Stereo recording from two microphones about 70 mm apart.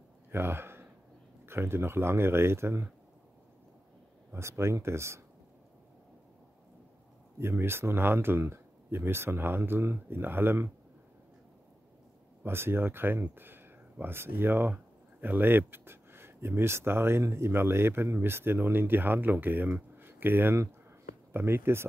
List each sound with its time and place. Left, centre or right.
0.3 s speech: right
4.3 s speech: right
7.3 s speech: right
12.4 s speech: right
19.7 s a sound: right
21.3 s speech: right